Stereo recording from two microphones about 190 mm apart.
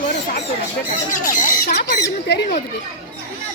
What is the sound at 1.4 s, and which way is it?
Speech, 45° left (ahead or behind).